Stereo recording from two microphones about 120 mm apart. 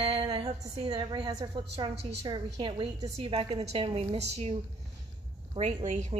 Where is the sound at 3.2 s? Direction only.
55° right (ahead or behind).